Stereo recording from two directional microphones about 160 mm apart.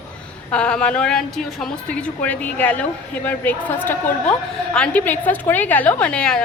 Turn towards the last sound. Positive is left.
turn(degrees=5)  # may be behind; listen again after turning